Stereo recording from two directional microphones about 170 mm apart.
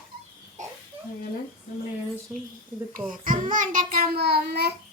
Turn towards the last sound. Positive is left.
turn(degrees=-70)  # may be behind; listen again after turning